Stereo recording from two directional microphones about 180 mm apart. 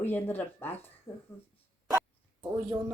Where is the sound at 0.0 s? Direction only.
10° left (ahead or behind).